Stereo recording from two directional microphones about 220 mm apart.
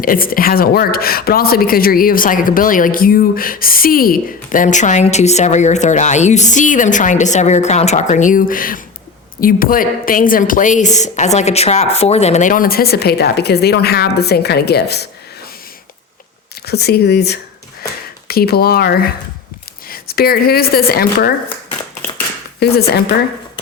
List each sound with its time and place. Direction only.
0.0 s speech: 40° left (ahead or behind)
16.6 s speech: 45° left (ahead or behind)
22.6 s speech: 45° left (ahead or behind)